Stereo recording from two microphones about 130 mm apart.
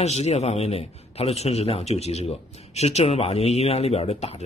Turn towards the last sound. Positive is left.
turn(degrees=50)  # may be behind; listen again after turning